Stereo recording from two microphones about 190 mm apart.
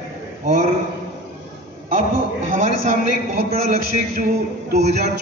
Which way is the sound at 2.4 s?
40° right (ahead or behind).